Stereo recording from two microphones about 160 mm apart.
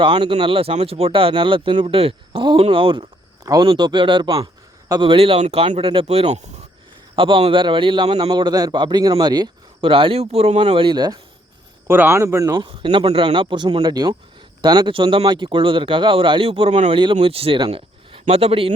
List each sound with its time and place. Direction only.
0.0 s a man's voice: 30° right (ahead or behind); by 6.5 s 45° right (ahead or behind)
7.2 s a man's voice: 35° right (ahead or behind)
11.9 s a man's voice: 15° right (ahead or behind); by 16.9 s 40° right (ahead or behind)
16.9 s a man's voice: 30° right (ahead or behind)